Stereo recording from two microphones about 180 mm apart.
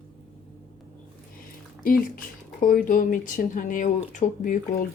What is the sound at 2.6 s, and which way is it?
Speech, 50° left (ahead or behind).